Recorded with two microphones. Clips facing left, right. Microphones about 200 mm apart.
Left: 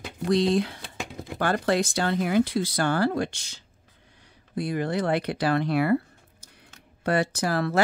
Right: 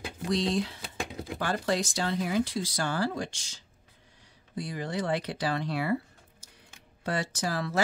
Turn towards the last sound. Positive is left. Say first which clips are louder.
# left 6 dB
turn(degrees=65)  # may be behind; listen again after turning